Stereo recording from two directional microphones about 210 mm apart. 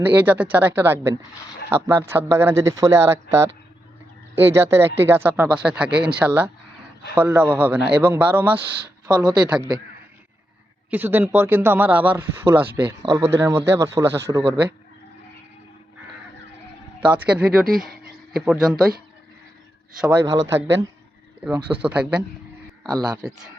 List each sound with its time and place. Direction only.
0.0 s a man's voice: 10° right (ahead or behind)
9.1 s speech: 20° right (ahead or behind)
10.9 s a man's voice: 10° right (ahead or behind)
17.0 s a man's voice: 5° right (ahead or behind)
20.0 s a man's voice: 10° right (ahead or behind)
22.9 s a man's voice: 15° right (ahead or behind)